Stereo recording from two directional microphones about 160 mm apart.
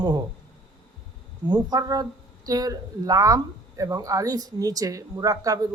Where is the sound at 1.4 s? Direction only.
25° right (ahead or behind).